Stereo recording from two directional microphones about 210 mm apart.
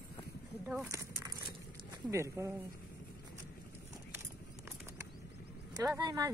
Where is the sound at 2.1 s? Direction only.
15° right (ahead or behind).